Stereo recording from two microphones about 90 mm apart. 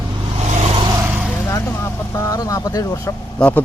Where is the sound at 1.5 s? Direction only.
35° left (ahead or behind).